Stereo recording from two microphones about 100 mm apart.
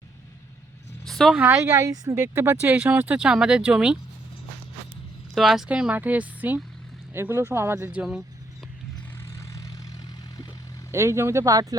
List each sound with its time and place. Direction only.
1.0 s a sound: centre (ahead or behind)
1.5 s speech: 25° right (ahead or behind); by 3.9 s 10° right (ahead or behind)
5.3 s speech: centre (ahead or behind); by 8.0 s 20° right (ahead or behind)
9.2 s vehicle: 25° left (ahead or behind)
10.9 s speech: 25° right (ahead or behind)